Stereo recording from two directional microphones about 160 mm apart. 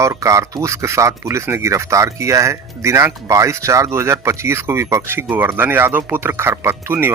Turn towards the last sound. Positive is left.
turn(degrees=-15)  # may be behind; listen again after turning